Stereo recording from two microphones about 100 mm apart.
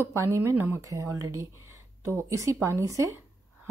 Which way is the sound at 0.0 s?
25° right (ahead or behind).